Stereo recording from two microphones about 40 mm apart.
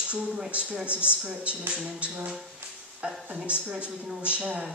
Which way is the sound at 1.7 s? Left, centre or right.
Right.